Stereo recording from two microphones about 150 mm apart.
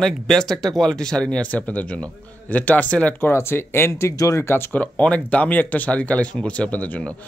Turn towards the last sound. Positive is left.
turn(degrees=10)  # may be behind; listen again after turning